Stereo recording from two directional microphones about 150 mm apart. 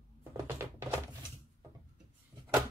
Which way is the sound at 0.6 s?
15° right (ahead or behind).